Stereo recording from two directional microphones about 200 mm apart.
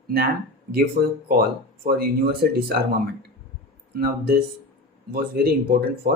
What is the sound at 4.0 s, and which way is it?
Speech, 50° right (ahead or behind).